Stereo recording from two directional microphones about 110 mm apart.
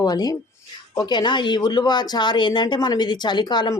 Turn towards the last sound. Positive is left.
turn(degrees=40)  # may be behind; listen again after turning